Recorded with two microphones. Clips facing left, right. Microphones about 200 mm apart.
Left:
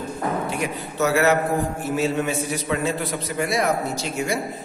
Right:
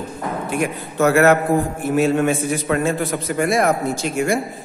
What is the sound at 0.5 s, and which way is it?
A man's voice, 55° right (ahead or behind).